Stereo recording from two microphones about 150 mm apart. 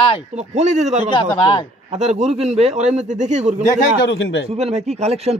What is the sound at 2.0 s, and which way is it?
Speech, 45° right (ahead or behind).